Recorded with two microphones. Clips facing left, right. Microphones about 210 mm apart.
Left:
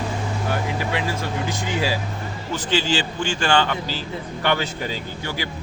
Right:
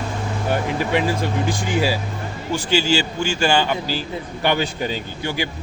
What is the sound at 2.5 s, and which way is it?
A man's voice, 10° right (ahead or behind).